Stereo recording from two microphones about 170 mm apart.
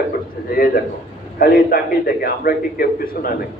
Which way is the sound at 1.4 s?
60° left (ahead or behind).